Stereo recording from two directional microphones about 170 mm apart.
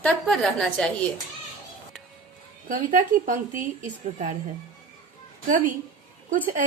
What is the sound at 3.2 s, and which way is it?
Speech, 50° right (ahead or behind).